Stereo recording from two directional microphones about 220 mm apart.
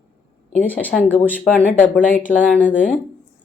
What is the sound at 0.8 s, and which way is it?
Speech, 5° left (ahead or behind).